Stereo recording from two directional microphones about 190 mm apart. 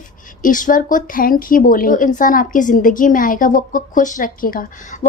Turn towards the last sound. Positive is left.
turn(degrees=40)  # may be behind; listen again after turning